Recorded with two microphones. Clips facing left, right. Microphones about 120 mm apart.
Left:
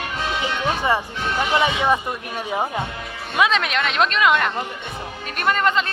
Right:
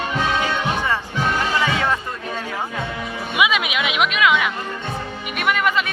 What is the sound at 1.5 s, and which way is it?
Speech, 20° left (ahead or behind).